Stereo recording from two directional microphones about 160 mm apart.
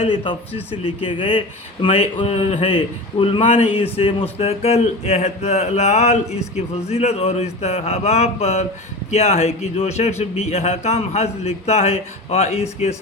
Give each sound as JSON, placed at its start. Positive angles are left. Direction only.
{"t": 0.0, "sound": "a man's voice", "side_deg": 40}